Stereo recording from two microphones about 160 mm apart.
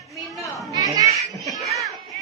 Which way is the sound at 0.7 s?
25° right (ahead or behind).